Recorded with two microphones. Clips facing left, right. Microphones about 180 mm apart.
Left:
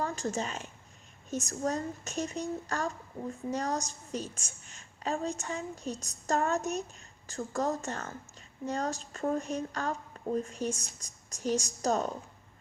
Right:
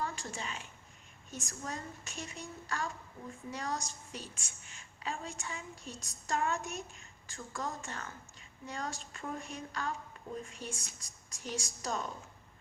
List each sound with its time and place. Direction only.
0.0 s a woman's voice: 40° left (ahead or behind)